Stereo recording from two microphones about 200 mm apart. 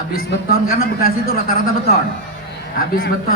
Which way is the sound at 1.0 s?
50° left (ahead or behind).